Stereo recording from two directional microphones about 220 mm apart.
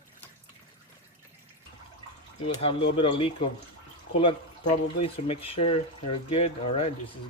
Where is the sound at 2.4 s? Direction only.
25° left (ahead or behind).